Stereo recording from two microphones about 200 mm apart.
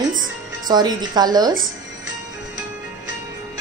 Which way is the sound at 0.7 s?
20° right (ahead or behind).